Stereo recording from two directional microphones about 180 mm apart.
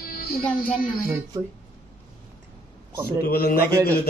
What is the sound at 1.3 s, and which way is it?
Speech, 20° right (ahead or behind).